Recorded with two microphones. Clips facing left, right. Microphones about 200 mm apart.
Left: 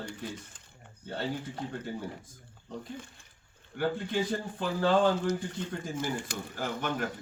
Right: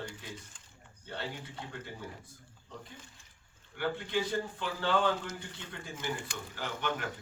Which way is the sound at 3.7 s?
40° left (ahead or behind).